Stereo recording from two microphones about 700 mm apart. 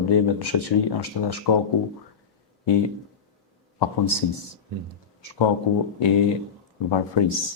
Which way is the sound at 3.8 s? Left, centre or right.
Left.